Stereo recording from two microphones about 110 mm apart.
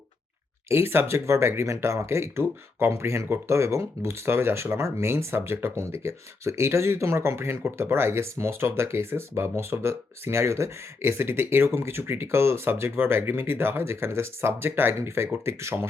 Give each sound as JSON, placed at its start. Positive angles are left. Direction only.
{"t": 0.7, "sound": "speech", "side_deg": -20}